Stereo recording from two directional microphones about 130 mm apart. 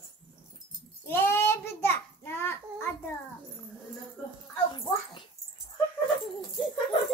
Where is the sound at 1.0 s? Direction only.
20° left (ahead or behind).